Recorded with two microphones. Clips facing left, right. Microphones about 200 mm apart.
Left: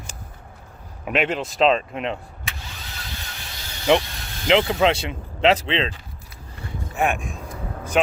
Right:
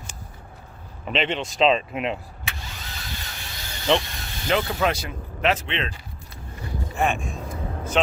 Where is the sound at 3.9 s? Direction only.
10° left (ahead or behind); by 5.9 s 30° left (ahead or behind).